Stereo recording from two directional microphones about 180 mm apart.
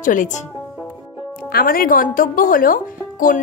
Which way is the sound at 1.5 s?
55° left (ahead or behind).